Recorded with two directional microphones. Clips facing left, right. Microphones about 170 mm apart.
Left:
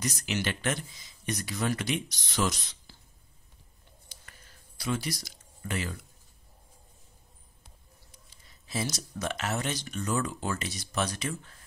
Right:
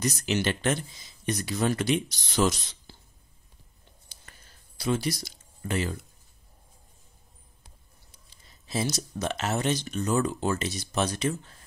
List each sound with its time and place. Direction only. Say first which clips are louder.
0.0 s speech: right 5 dB; 30° right (ahead or behind)
4.1 s a sound: even; 30° right (ahead or behind)
8.6 s speech: right 4 dB; 25° right (ahead or behind)